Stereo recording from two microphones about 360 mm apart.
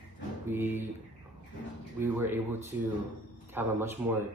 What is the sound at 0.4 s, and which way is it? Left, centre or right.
Speech, centre.